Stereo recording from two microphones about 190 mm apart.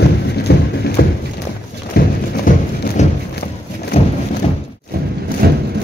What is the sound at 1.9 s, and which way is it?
Clip-clop, 50° left (ahead or behind).